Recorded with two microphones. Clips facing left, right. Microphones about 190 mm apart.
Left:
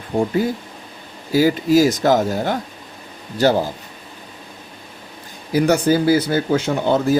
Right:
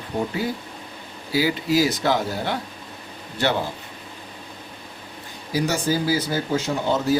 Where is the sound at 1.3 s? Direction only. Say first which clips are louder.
Left 7 dB; 45° left (ahead or behind).